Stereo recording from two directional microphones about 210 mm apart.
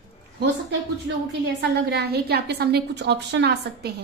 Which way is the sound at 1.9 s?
50° right (ahead or behind).